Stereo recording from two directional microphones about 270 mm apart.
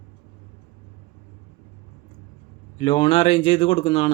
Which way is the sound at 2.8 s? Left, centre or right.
Centre.